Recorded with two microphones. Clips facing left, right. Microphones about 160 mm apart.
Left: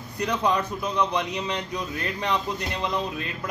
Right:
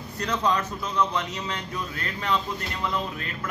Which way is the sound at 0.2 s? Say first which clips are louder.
Left 1 dB; 10° left (ahead or behind).